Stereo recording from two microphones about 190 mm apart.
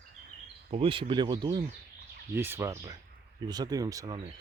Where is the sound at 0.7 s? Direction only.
30° right (ahead or behind).